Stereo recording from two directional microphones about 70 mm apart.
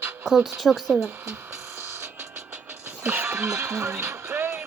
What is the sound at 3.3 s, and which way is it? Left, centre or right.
Music, centre.